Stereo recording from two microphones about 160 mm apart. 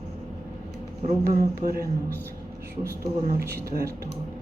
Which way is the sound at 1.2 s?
70° right (ahead or behind).